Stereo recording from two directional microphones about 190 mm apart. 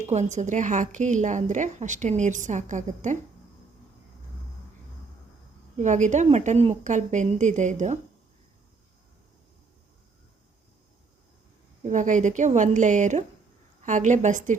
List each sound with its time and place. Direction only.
0.1 s a woman's voice: 35° right (ahead or behind)
5.7 s a woman's voice: 40° right (ahead or behind)
11.8 s a woman's voice: 40° right (ahead or behind)